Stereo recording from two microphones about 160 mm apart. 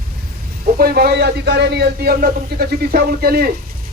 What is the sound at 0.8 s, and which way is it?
Speech, 70° right (ahead or behind).